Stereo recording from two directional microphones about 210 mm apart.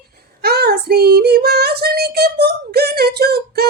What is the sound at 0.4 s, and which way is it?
Child singing, 50° right (ahead or behind).